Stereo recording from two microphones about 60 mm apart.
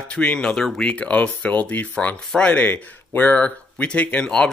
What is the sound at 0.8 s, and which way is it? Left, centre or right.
Speech, left.